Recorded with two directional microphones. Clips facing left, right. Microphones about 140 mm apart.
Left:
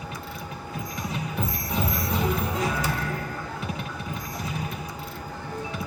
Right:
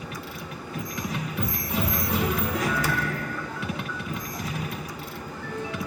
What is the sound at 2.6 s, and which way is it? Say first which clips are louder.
Music: even; 25° left (ahead or behind).